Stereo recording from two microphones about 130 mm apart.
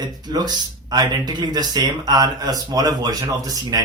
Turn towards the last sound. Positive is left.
turn(degrees=-30)  # may be behind; listen again after turning